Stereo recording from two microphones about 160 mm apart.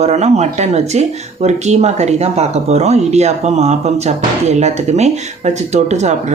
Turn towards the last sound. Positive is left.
turn(degrees=-45)  # may be behind; listen again after turning